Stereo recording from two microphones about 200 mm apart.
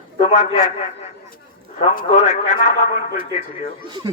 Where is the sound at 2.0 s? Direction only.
35° left (ahead or behind).